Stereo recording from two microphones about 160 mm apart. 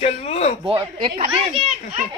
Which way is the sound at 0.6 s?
30° right (ahead or behind).